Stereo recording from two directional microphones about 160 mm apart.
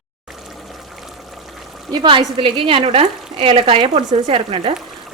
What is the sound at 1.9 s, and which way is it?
A woman's voice, 30° right (ahead or behind).